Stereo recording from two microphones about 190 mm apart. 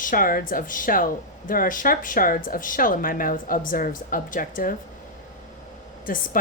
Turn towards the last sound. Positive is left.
turn(degrees=50)  # may be behind; listen again after turning